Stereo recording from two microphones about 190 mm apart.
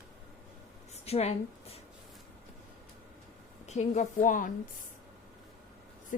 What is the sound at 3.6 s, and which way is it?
Speech, 35° left (ahead or behind).